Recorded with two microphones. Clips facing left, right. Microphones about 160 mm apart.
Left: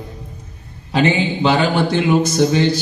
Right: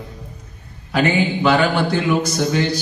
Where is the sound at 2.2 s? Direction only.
25° left (ahead or behind).